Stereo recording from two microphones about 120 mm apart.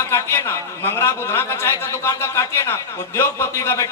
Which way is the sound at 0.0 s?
20° left (ahead or behind).